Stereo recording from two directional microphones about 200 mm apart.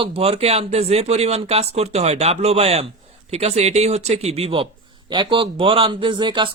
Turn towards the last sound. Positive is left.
turn(degrees=-25)  # may be behind; listen again after turning